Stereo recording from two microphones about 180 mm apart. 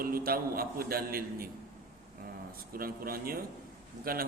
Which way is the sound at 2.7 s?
55° right (ahead or behind).